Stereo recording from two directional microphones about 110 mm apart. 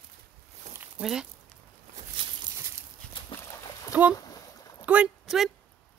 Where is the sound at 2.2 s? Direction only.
50° right (ahead or behind).